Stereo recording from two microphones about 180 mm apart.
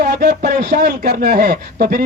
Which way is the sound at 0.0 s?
65° right (ahead or behind).